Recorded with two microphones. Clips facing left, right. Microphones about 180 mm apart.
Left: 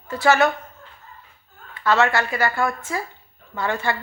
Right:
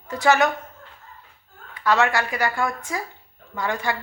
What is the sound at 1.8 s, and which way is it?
Speech, 15° right (ahead or behind).